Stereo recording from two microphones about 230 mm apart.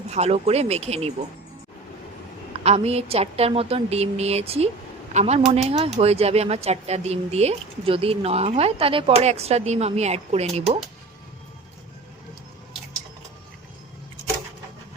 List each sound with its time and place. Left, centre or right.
0.1 s speech: right
2.6 s speech: right